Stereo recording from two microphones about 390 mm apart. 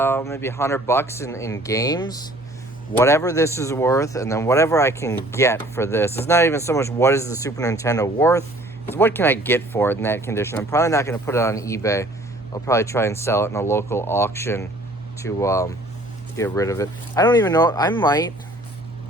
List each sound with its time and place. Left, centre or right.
0.0 s a man's voice: centre